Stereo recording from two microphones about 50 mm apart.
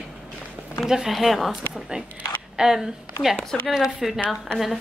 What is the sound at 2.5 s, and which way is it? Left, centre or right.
Speech, centre.